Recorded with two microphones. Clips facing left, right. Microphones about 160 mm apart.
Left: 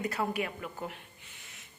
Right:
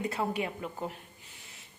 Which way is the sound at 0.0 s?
25° right (ahead or behind).